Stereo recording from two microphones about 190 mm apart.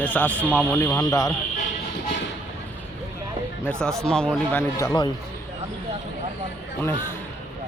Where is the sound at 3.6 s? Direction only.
5° left (ahead or behind).